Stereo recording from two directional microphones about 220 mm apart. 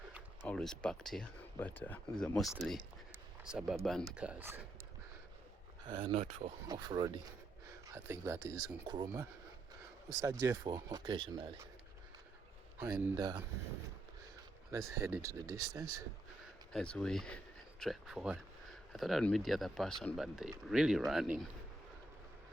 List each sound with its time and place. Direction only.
0.4 s speech: 5° left (ahead or behind)
5.9 s speech: 25° right (ahead or behind)
6.7 s speech: 15° right (ahead or behind)
12.8 s speech: 15° right (ahead or behind)
14.9 s speech: 10° right (ahead or behind)
16.7 s speech: 5° left (ahead or behind)